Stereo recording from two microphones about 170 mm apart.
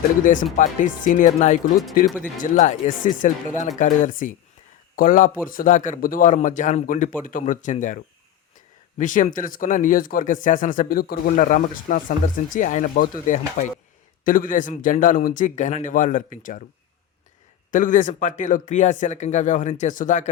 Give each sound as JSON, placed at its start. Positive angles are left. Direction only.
{"t": 0.5, "sound": "speech", "side_deg": 50}
{"t": 17.7, "sound": "speech", "side_deg": 50}